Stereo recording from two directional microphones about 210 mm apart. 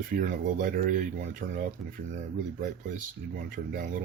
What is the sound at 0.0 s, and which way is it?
Speech, 40° right (ahead or behind).